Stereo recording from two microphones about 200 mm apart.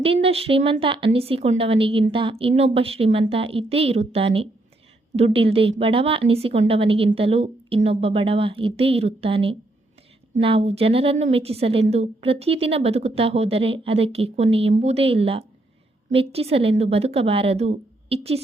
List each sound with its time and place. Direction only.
0.0 s a woman's voice: 30° right (ahead or behind)